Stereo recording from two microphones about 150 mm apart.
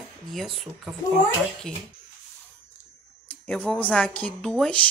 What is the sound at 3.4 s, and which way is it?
A woman's voice, 5° left (ahead or behind).